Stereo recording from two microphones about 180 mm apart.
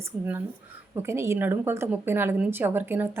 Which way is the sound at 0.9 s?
15° right (ahead or behind).